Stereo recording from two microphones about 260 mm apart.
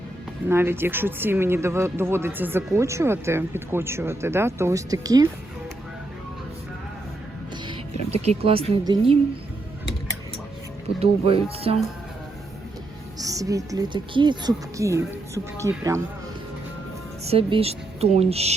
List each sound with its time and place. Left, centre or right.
0.4 s speech: centre
7.5 s speech: right
10.9 s a woman's voice: right
13.1 s speech: centre
17.2 s a woman's voice: right